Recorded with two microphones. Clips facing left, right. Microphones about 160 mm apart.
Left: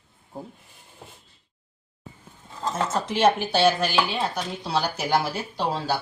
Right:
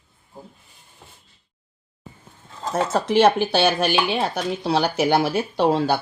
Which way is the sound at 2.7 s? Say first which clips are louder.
Right 8 dB; 65° right (ahead or behind).